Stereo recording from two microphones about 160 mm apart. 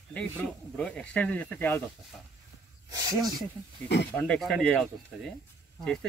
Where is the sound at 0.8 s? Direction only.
5° left (ahead or behind).